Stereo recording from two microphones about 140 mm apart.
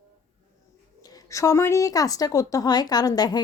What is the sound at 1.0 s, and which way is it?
Speech, 25° left (ahead or behind).